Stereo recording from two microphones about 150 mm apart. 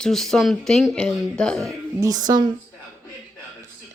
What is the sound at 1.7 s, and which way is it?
Speech, 25° right (ahead or behind).